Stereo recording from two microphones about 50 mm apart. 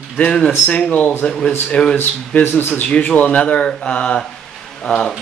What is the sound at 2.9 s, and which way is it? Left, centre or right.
Speech, left.